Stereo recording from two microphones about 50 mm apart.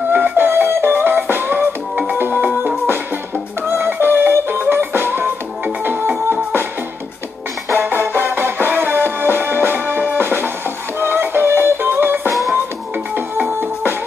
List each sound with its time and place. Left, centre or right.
0.1 s music: right
3.7 s music: right
7.7 s music: right